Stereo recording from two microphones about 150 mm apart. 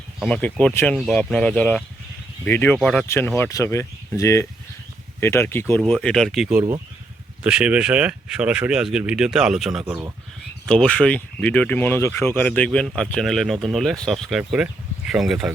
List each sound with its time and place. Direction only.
0.3 s speech: 5° left (ahead or behind)
0.9 s speech: 5° left (ahead or behind)
3.1 s speech: 15° left (ahead or behind); by 9.8 s centre (ahead or behind)
9.8 s speech: 15° right (ahead or behind)
10.7 s speech: 5° left (ahead or behind)